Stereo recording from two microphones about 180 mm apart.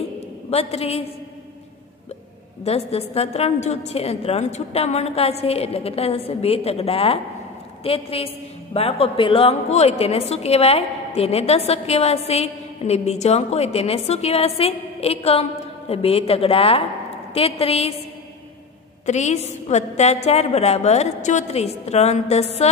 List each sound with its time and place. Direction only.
0.5 s a woman's voice: 35° left (ahead or behind)
2.6 s a woman's voice: 35° left (ahead or behind)
19.0 s a woman's voice: 40° left (ahead or behind)